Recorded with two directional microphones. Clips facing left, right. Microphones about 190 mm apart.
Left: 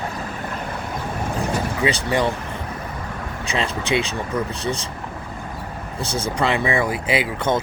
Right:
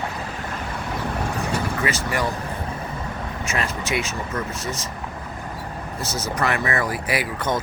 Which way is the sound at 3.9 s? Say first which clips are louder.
Left 5 dB; 25° left (ahead or behind).